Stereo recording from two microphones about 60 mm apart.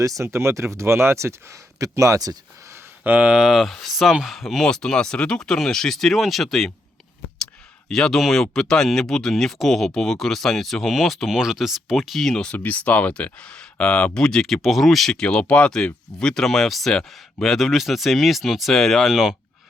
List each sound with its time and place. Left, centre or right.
0.0 s speech: right
3.0 s speech: right
3.3 s speech: centre
3.6 s speech: centre
4.6 s speech: centre
7.9 s speech: centre
12.5 s speech: left
14.4 s speech: centre
15.1 s speech: centre
19.1 s speech: centre